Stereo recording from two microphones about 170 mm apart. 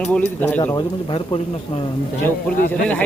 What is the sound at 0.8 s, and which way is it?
Speech, 30° left (ahead or behind).